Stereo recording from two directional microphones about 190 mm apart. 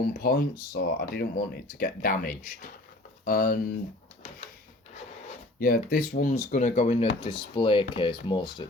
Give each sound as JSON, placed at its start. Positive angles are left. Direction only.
{"t": 0.1, "sound": "speech", "side_deg": 50}
{"t": 5.5, "sound": "speech", "side_deg": 50}